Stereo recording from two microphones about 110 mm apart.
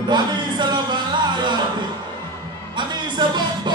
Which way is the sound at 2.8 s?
45° right (ahead or behind).